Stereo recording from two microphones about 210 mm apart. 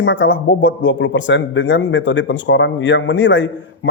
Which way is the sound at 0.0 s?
60° left (ahead or behind).